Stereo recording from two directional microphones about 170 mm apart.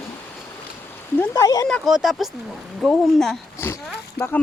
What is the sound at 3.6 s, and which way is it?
Speech, 15° left (ahead or behind).